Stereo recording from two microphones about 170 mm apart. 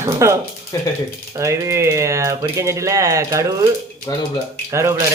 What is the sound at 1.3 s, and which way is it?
Speech, 20° right (ahead or behind).